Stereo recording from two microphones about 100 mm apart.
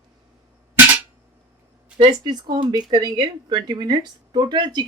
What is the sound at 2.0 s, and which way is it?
Speech, 45° right (ahead or behind).